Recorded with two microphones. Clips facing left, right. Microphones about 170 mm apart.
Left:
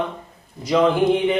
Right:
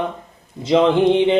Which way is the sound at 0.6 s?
25° right (ahead or behind).